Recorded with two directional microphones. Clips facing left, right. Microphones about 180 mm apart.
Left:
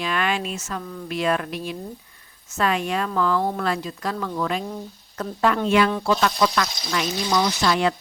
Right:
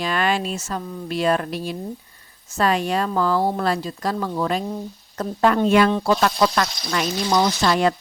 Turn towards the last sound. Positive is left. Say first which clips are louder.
# right 2 dB
turn(degrees=-40)  # may be behind; listen again after turning